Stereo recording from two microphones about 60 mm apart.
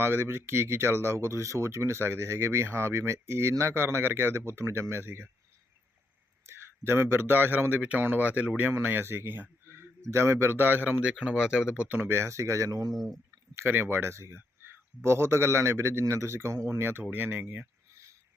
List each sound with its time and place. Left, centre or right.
0.0 s speech: right
6.4 s a man's voice: right
7.8 s speech: right
8.7 s speech: right
11.0 s speech: centre
11.8 s speech: right
13.6 s speech: right